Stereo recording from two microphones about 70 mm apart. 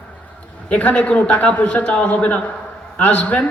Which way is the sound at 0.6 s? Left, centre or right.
Left.